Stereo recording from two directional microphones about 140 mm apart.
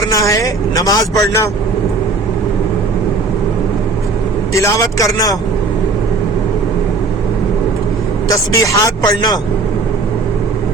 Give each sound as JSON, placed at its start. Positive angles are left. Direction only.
{"t": 0.1, "sound": "speech", "side_deg": 25}
{"t": 4.5, "sound": "speech", "side_deg": 25}
{"t": 8.3, "sound": "speech", "side_deg": 25}